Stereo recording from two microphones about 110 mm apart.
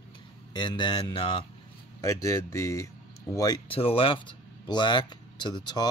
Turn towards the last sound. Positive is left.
turn(degrees=40)  # may be behind; listen again after turning